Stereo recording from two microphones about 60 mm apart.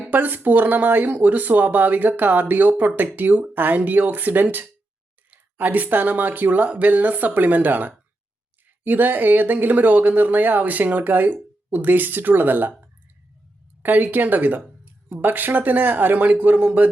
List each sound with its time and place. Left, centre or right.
0.1 s speech: right